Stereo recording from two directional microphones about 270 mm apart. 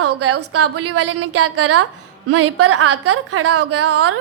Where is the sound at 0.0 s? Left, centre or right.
Right.